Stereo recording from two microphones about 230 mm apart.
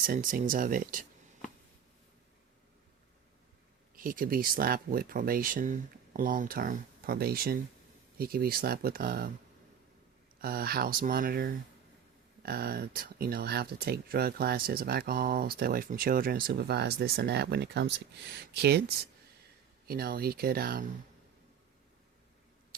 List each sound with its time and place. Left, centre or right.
0.0 s speech: right
3.9 s speech: right
10.4 s speech: right